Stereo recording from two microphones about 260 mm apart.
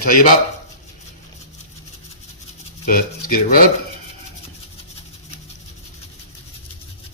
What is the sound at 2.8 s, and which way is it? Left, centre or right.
Speech, left.